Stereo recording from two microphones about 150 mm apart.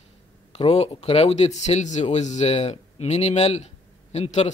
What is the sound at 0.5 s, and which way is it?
Speech, 45° left (ahead or behind).